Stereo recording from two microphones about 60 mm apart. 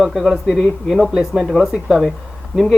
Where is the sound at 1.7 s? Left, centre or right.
Centre.